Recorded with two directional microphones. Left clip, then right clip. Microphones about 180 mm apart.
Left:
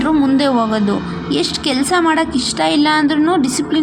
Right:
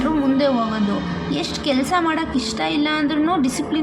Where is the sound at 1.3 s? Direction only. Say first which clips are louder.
Left 5 dB; 35° left (ahead or behind).